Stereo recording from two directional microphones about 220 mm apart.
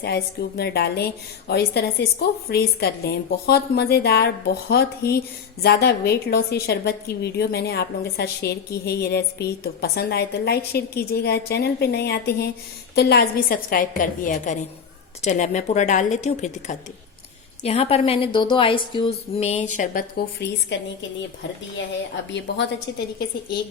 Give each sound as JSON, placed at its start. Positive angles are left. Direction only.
{"t": 0.0, "sound": "a woman's voice", "side_deg": 45}
{"t": 22.3, "sound": "a woman's voice", "side_deg": 55}